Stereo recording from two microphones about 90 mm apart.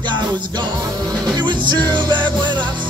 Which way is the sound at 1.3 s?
60° right (ahead or behind).